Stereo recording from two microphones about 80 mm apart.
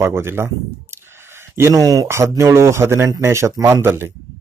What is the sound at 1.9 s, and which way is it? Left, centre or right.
Speech, right.